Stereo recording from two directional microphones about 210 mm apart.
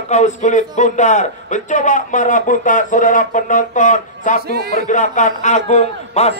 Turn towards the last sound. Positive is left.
turn(degrees=30)  # may be behind; listen again after turning